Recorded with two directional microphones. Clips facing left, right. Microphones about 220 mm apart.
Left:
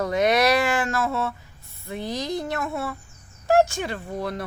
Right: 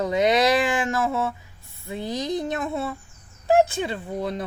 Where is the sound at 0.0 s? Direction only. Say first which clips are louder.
Right 1 dB; 20° right (ahead or behind).